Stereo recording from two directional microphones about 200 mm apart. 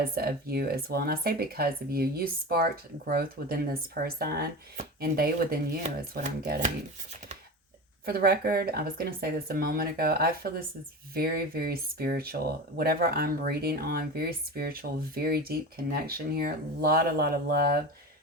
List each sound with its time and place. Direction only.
0.0 s speech: 50° right (ahead or behind)
8.0 s speech: 50° right (ahead or behind)